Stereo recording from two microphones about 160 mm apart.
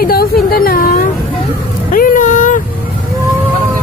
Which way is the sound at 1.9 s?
60° left (ahead or behind).